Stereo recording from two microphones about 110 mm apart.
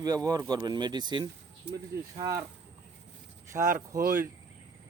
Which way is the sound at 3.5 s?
30° right (ahead or behind).